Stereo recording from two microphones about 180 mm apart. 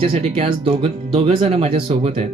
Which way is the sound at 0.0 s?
30° right (ahead or behind).